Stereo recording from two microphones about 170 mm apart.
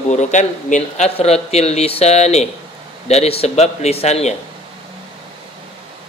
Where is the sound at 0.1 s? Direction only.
45° left (ahead or behind).